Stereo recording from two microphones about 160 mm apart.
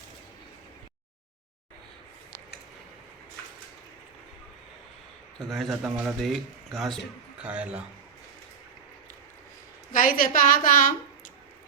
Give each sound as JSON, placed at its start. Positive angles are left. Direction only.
{"t": 5.4, "sound": "a man's voice", "side_deg": 0}
{"t": 9.9, "sound": "a woman's voice", "side_deg": 60}